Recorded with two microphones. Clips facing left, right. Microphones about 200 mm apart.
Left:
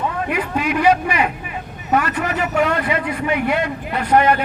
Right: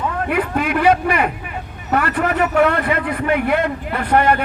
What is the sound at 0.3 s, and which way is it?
A man's voice, 50° right (ahead or behind).